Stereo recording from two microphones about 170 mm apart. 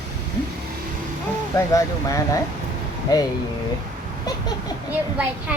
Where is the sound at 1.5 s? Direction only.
20° left (ahead or behind).